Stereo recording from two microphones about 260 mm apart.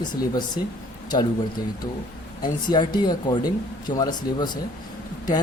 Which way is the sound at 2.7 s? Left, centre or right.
Centre.